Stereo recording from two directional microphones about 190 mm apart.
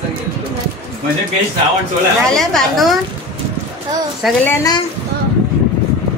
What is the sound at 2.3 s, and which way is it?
Speech, centre (ahead or behind).